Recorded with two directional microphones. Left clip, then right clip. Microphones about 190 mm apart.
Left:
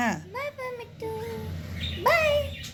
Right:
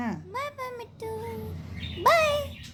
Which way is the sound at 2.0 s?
65° right (ahead or behind).